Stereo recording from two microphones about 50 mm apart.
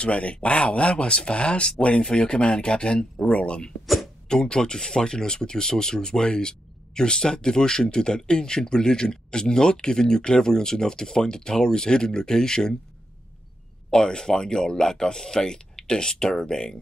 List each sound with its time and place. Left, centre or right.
0.0 s speech: left
3.8 s a sound: centre
4.3 s speech: centre
13.8 s speech: centre